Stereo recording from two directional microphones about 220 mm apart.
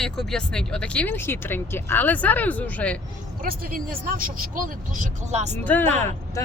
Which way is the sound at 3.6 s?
40° right (ahead or behind).